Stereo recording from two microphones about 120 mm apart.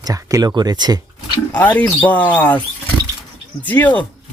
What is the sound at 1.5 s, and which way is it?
Speech, 15° left (ahead or behind).